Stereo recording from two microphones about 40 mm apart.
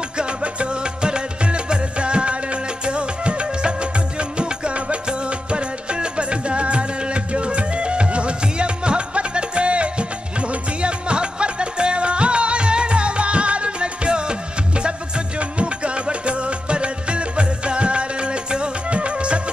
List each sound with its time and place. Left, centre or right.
0.2 s music: right